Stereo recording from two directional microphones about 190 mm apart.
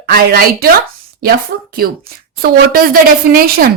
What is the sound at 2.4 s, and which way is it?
Speech, 50° right (ahead or behind).